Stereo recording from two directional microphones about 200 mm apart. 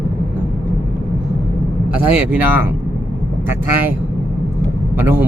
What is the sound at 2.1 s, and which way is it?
Speech, 10° right (ahead or behind).